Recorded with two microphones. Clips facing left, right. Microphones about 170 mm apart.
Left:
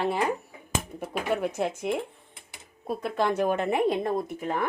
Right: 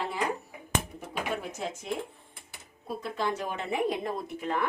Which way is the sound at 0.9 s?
60° left (ahead or behind).